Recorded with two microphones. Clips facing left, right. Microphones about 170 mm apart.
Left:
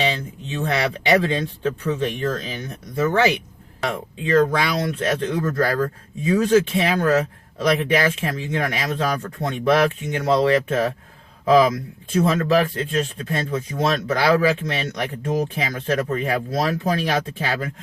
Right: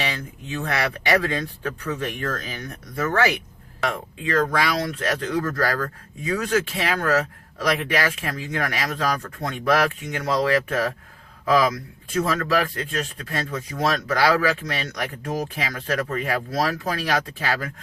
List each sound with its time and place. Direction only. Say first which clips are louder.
0.0 s speech: left 5 dB; 25° left (ahead or behind)